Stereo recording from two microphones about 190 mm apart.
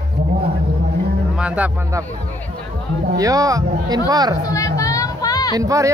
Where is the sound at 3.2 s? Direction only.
20° right (ahead or behind).